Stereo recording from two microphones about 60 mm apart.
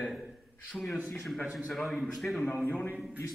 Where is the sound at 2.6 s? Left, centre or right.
Left.